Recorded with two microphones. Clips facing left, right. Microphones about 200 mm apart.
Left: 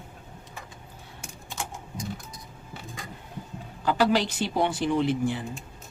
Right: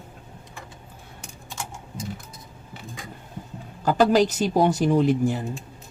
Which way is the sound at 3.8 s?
45° right (ahead or behind).